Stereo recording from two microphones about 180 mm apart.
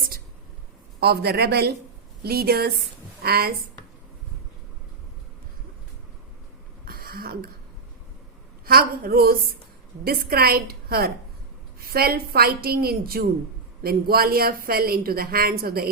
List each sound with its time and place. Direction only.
0.9 s speech: 60° right (ahead or behind)
6.8 s a sound: 55° right (ahead or behind)
8.6 s speech: 55° right (ahead or behind)